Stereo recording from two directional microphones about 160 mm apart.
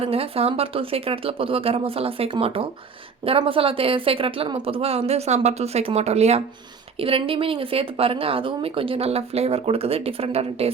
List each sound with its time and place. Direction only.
0.0 s speech: 35° right (ahead or behind)